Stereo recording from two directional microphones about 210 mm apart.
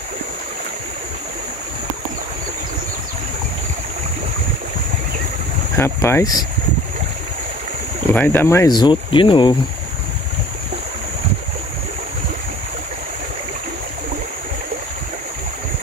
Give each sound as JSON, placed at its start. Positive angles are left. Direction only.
{"t": 5.8, "sound": "speech", "side_deg": 10}
{"t": 8.1, "sound": "speech", "side_deg": 10}